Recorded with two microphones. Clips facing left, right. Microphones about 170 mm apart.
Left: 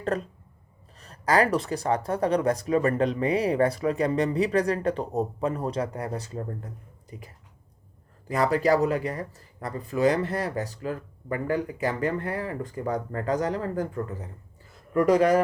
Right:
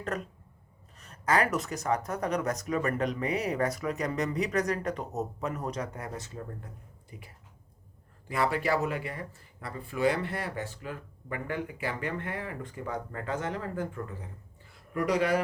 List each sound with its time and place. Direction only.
0.1 s speech: 30° left (ahead or behind)
8.3 s speech: 40° left (ahead or behind)